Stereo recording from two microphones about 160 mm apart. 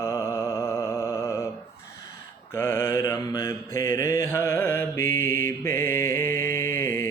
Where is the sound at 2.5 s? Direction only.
15° left (ahead or behind).